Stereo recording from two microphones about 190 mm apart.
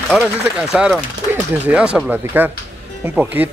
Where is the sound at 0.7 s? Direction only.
5° right (ahead or behind).